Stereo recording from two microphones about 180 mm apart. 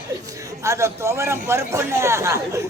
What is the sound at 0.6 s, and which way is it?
A man's voice, 15° right (ahead or behind).